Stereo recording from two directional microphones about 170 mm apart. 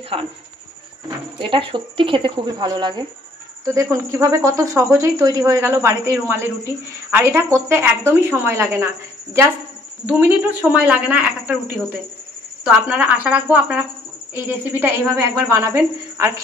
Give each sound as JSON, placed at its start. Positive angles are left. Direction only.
{"t": 1.0, "sound": "a woman's voice", "side_deg": -30}